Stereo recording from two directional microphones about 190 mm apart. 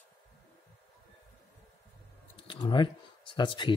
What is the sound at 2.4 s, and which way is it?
Speech, 25° left (ahead or behind).